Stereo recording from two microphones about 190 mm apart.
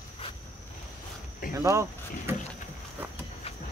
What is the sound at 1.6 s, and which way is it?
Speech, 15° right (ahead or behind).